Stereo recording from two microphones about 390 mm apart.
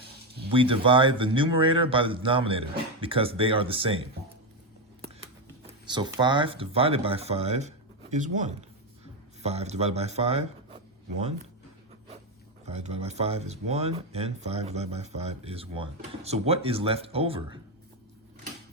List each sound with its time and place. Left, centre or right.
0.4 s speech: centre
5.8 s speech: centre
12.6 s speech: centre